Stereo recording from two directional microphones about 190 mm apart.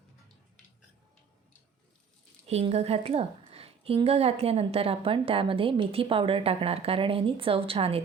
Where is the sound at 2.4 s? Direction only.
30° right (ahead or behind).